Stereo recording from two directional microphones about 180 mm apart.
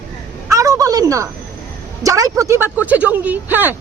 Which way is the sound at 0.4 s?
15° right (ahead or behind).